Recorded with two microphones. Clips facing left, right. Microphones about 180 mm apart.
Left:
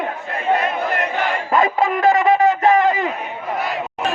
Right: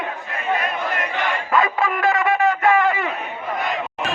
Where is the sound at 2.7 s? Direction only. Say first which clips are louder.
Left 3 dB; 40° left (ahead or behind).